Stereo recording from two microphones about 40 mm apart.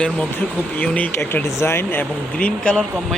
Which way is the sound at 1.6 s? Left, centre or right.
Left.